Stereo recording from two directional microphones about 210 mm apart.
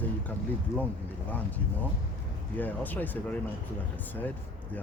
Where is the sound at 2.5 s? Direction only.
10° left (ahead or behind).